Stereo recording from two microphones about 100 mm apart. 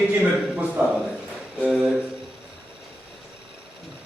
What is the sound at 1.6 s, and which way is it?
Speech, 5° right (ahead or behind).